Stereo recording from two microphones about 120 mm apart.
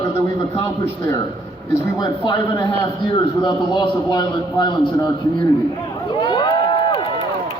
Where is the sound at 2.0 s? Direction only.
40° left (ahead or behind).